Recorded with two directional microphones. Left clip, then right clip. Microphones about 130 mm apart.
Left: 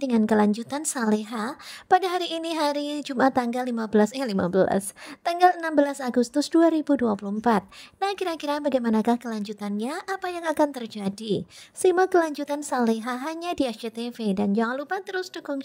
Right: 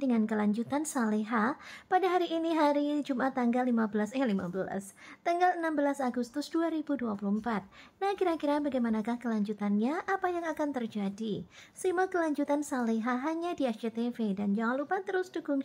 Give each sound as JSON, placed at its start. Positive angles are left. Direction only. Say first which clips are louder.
{"t": 0.0, "sound": "a woman's voice", "louder": "left 9 dB", "side_deg": 55}